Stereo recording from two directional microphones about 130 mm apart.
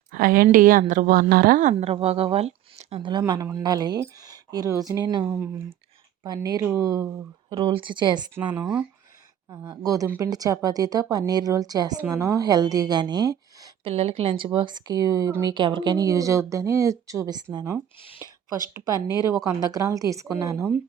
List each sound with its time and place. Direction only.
0.1 s a woman's voice: 90° right
1.8 s speech: 50° right (ahead or behind); by 7.1 s 25° right (ahead or behind)
7.5 s speech: 40° right (ahead or behind)
9.5 s speech: 20° right (ahead or behind)
13.8 s speech: 50° right (ahead or behind); by 15.5 s 25° right (ahead or behind)
15.5 s speech: 35° right (ahead or behind)
18.2 s a sound: 25° right (ahead or behind)
18.7 s speech: 25° right (ahead or behind)